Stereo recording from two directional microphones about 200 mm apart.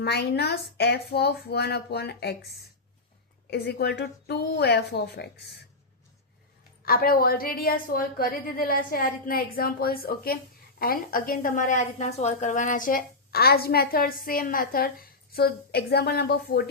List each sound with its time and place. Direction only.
0.0 s a woman's voice: 55° left (ahead or behind)
6.8 s a woman's voice: 50° left (ahead or behind)